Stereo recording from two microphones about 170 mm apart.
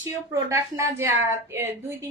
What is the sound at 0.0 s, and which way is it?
A woman's voice, 15° right (ahead or behind).